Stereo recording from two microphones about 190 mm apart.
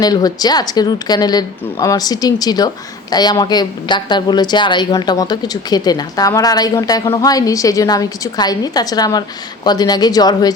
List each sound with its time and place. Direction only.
0.0 s a woman's voice: 20° left (ahead or behind)